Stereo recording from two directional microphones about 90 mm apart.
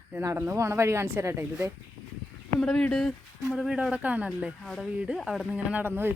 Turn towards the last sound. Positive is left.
turn(degrees=-25)  # may be behind; listen again after turning